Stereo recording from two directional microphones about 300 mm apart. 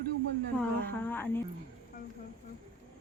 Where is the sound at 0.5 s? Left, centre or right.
Centre.